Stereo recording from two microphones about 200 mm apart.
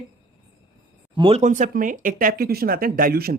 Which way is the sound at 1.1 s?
30° right (ahead or behind).